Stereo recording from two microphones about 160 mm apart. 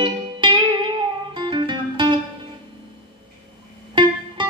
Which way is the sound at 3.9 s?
30° right (ahead or behind).